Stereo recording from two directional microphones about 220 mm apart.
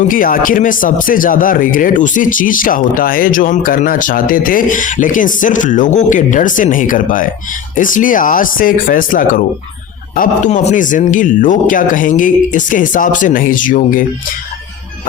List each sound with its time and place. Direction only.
0.1 s speech: 40° left (ahead or behind)